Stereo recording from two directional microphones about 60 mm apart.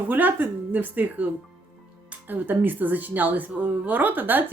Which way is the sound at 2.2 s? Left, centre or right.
Right.